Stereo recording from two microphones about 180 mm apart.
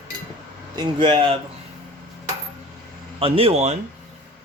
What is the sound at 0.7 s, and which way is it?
Speech, 25° right (ahead or behind).